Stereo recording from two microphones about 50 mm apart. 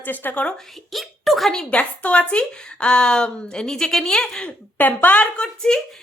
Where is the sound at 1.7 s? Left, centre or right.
Left.